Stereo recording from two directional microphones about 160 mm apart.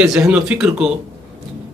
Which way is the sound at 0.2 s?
5° right (ahead or behind).